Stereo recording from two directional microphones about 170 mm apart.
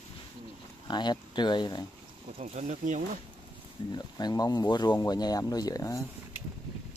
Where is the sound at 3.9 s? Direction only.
25° left (ahead or behind).